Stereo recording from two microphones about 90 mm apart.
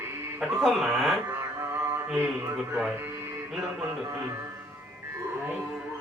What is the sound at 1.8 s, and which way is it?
Mantra, 30° right (ahead or behind).